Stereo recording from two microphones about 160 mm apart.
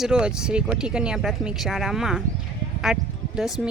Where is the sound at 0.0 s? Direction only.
5° right (ahead or behind).